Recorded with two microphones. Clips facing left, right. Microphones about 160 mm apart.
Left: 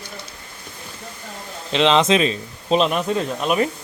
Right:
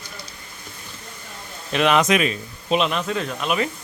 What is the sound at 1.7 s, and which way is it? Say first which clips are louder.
A man's voice: left 2 dB; 25° left (ahead or behind).